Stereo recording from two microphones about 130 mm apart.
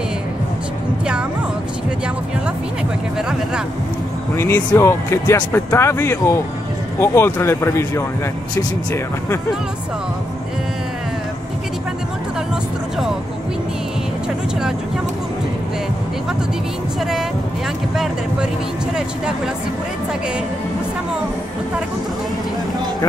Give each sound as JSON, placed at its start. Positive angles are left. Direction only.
{"t": 4.4, "sound": "speech", "side_deg": 20}
{"t": 17.9, "sound": "speech", "side_deg": 0}